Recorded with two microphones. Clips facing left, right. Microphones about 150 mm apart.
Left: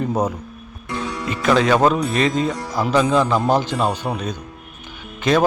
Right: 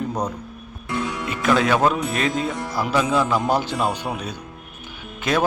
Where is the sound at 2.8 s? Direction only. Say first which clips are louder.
Left 4 dB; 5° right (ahead or behind).